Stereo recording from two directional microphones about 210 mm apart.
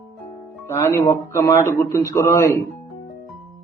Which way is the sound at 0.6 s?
15° left (ahead or behind).